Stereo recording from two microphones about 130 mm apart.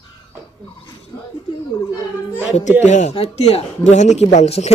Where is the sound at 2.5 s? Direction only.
65° left (ahead or behind).